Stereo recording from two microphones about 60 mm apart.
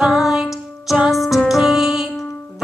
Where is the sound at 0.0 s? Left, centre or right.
Centre.